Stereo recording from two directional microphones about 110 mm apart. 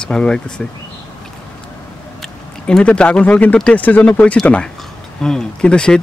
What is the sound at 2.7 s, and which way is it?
Speech, 10° left (ahead or behind).